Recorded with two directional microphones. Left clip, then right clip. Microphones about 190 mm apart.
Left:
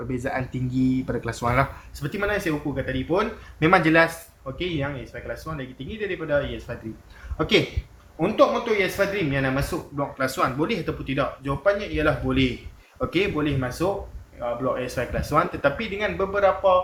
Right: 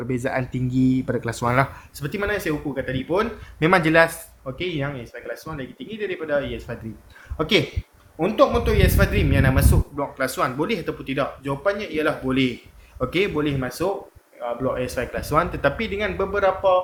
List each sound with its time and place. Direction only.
0.1 s speech: 45° right (ahead or behind)